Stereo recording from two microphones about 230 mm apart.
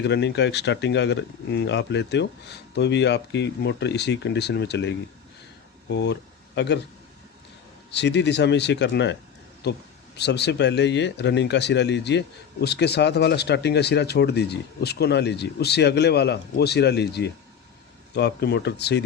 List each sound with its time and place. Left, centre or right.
0.0 s speech: left
7.9 s speech: left